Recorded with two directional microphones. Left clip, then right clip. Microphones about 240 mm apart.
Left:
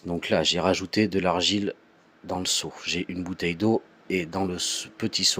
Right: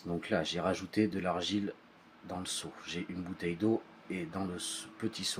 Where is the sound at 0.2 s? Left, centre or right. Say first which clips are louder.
Left 11 dB; left.